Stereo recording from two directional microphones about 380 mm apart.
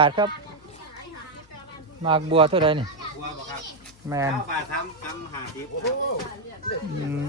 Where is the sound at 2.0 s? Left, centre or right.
Centre.